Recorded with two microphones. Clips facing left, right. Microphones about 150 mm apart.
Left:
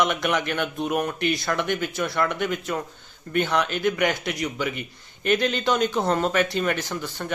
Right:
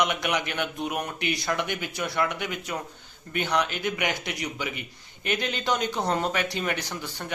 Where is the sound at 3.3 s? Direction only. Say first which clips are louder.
Left 3 dB; 15° right (ahead or behind).